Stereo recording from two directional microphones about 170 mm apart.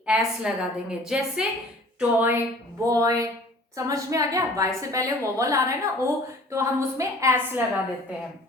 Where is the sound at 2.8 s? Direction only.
20° right (ahead or behind).